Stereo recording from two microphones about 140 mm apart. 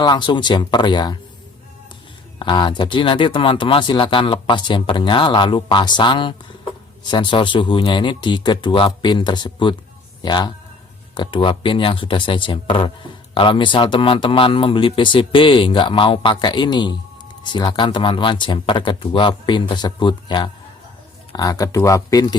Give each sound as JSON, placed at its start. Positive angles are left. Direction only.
{"t": 0.0, "sound": "speech", "side_deg": 35}
{"t": 2.4, "sound": "speech", "side_deg": 35}